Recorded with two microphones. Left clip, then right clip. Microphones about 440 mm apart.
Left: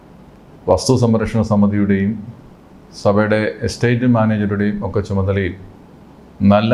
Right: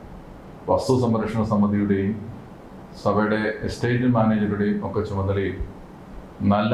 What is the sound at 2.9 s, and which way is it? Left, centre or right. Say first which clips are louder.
Speech: left 7 dB; left.